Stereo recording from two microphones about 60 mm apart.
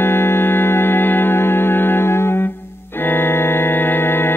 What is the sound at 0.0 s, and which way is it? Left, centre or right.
Music, left.